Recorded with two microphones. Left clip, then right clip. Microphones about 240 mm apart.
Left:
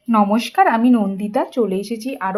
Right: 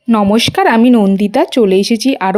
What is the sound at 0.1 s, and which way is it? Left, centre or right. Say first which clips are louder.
Speech: right 5 dB; right.